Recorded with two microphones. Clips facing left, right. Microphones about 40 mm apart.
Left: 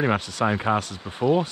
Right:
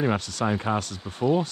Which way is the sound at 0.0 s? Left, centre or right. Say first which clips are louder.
Left 2 dB; left.